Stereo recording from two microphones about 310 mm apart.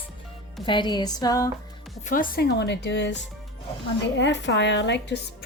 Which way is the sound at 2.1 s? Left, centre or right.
Left.